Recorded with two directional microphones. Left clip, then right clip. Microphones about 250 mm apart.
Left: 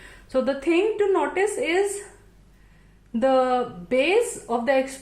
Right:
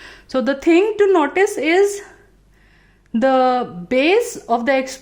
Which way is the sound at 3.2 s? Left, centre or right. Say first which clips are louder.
Right 5 dB; right.